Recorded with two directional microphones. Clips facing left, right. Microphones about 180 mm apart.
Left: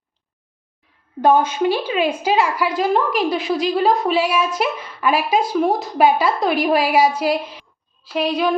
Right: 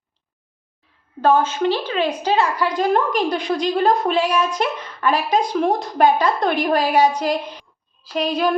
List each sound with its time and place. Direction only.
1.2 s a woman's voice: 15° left (ahead or behind)